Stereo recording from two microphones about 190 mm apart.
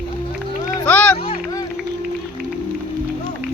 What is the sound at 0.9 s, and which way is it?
Music, 10° left (ahead or behind).